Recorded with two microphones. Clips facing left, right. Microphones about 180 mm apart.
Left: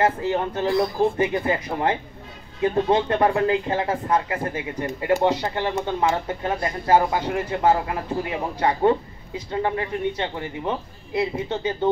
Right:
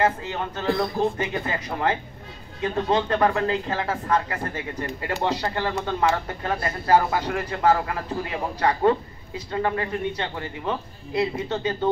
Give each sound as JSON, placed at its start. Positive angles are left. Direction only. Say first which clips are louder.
{"t": 0.0, "sound": "speech", "louder": "left 3 dB", "side_deg": 20}